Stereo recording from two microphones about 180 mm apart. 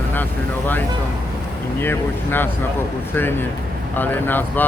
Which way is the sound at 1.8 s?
10° left (ahead or behind).